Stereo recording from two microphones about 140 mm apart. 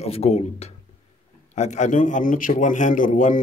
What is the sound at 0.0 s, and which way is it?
A man's voice, 50° left (ahead or behind).